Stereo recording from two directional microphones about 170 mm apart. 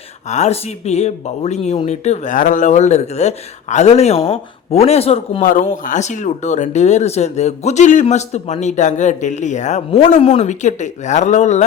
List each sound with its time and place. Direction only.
0.3 s speech: 40° left (ahead or behind)
5.4 s speech: 50° left (ahead or behind)